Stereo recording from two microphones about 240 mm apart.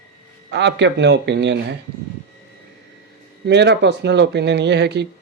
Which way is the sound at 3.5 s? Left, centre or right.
Right.